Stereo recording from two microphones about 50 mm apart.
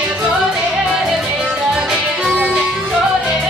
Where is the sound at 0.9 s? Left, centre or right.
Centre.